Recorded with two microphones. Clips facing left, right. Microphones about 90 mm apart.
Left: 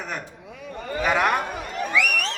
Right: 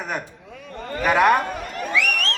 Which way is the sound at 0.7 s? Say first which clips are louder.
Left 1 dB; 10° left (ahead or behind).